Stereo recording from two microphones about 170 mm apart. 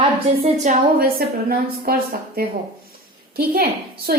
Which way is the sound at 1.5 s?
60° right (ahead or behind).